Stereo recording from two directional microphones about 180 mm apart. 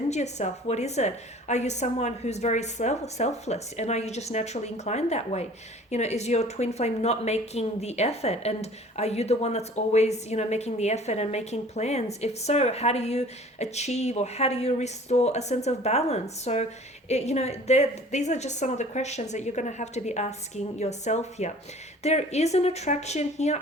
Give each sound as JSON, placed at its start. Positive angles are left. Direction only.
{"t": 0.1, "sound": "a woman's voice", "side_deg": 40}